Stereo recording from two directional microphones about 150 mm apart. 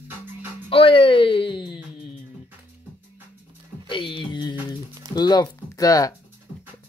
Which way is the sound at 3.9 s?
30° left (ahead or behind).